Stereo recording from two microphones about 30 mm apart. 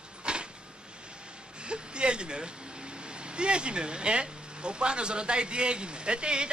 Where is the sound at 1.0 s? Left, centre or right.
Right.